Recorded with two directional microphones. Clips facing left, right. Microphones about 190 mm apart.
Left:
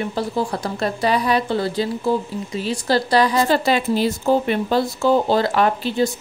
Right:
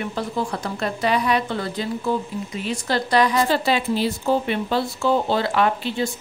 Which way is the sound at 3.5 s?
45° left (ahead or behind).